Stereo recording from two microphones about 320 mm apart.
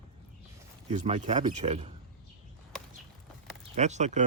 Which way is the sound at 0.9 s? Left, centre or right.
Centre.